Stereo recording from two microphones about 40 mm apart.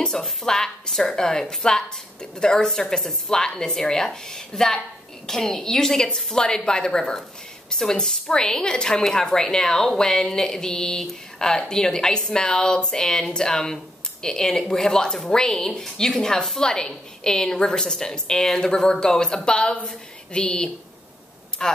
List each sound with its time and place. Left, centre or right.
0.0 s a woman's voice: centre